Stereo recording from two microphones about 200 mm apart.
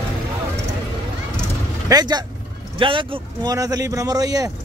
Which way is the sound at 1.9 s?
20° right (ahead or behind).